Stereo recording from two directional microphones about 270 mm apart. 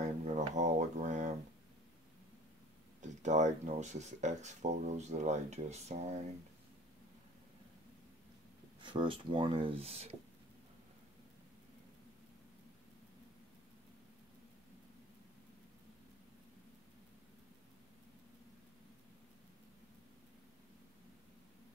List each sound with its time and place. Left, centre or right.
0.0 s a sound: right
3.0 s speech: right
8.8 s speech: centre